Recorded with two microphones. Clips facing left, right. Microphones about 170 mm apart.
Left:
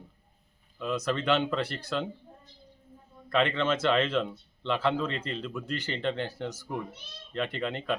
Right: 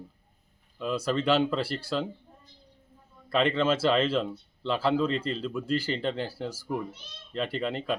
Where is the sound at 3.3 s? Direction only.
5° right (ahead or behind).